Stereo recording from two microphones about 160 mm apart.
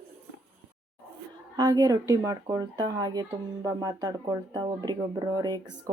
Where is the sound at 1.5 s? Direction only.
25° right (ahead or behind).